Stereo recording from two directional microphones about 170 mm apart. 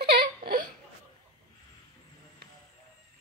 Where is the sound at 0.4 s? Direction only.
60° right (ahead or behind).